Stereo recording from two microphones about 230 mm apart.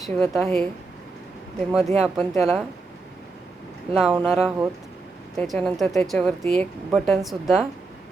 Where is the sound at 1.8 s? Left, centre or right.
Right.